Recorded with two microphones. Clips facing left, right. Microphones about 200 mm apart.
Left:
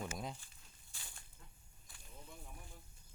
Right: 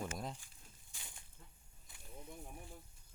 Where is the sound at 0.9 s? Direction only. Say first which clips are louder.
Even; 15° right (ahead or behind).